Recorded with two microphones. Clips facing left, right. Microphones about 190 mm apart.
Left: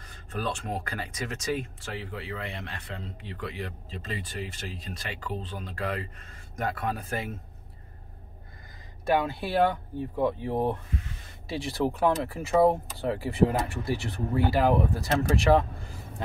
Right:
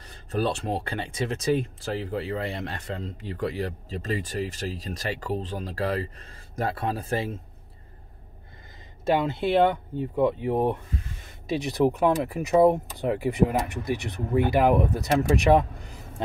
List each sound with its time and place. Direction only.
0.0 s speech: 35° right (ahead or behind)
9.0 s speech: 25° right (ahead or behind)